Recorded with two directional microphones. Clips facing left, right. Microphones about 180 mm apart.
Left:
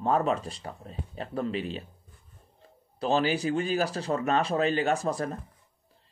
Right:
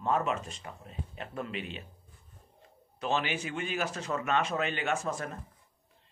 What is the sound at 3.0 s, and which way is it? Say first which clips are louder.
A man's voice: left 6 dB; 35° left (ahead or behind).